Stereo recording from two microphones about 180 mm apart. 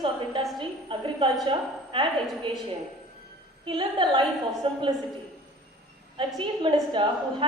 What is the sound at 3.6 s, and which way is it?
A woman's voice, 25° right (ahead or behind).